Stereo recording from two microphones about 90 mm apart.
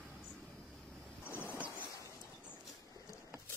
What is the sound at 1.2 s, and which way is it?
Waves, 25° left (ahead or behind).